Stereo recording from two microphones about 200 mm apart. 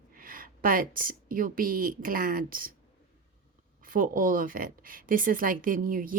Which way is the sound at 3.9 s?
40° right (ahead or behind).